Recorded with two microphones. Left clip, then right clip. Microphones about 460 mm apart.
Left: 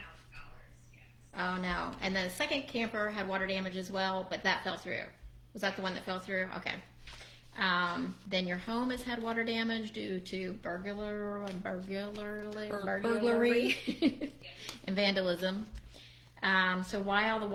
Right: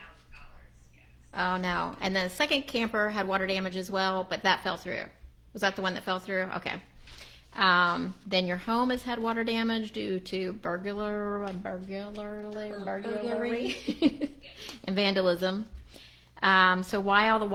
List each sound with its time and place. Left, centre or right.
1.4 s a woman's voice: right
11.6 s speech: centre
14.0 s a woman's voice: right